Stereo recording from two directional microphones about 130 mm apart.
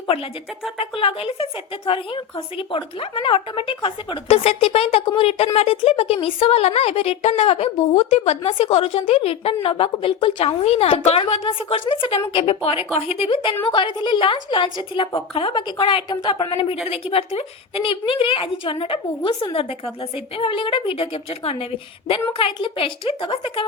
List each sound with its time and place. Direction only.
0.8 s a woman's voice: 45° left (ahead or behind)